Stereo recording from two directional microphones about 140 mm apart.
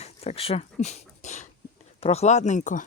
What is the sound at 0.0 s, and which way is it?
Speech, 45° left (ahead or behind).